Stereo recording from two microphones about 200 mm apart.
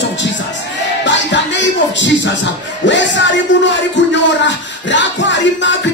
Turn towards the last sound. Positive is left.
turn(degrees=65)  # may be behind; listen again after turning